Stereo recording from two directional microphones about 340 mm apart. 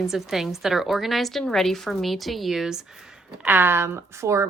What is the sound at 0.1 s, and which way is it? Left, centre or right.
A woman's voice, centre.